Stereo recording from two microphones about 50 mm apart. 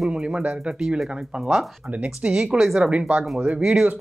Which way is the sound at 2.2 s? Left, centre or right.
Centre.